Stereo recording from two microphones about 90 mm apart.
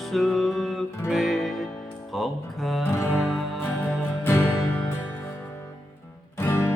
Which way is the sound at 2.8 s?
30° left (ahead or behind).